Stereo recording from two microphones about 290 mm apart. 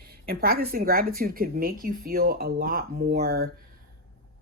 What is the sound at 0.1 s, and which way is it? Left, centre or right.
Speech, right.